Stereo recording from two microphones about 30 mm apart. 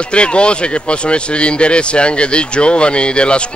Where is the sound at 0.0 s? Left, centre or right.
Left.